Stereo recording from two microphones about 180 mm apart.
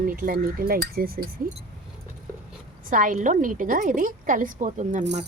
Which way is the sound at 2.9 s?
50° right (ahead or behind).